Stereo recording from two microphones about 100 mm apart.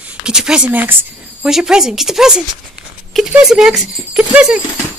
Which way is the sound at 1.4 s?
5° right (ahead or behind).